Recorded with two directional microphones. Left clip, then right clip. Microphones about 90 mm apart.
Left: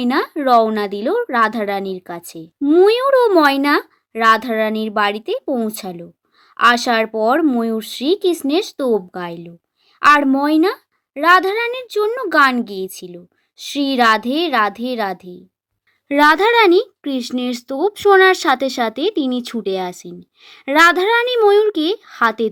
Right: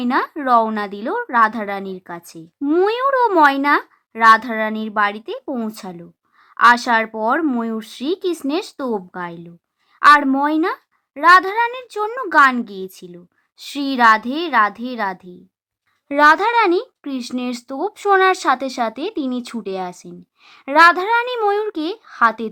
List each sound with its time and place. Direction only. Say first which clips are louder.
0.0 s speech: left 2 dB; 20° left (ahead or behind)
2.6 s speech: left 5 dB; 5° left (ahead or behind)
2.8 s speech: left 3 dB; 20° left (ahead or behind)
13.6 s speech: even; 10° left (ahead or behind)